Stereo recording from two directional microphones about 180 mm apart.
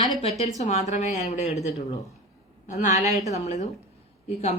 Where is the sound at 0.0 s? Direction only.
30° left (ahead or behind).